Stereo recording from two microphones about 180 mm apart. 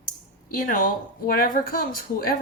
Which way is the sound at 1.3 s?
55° left (ahead or behind).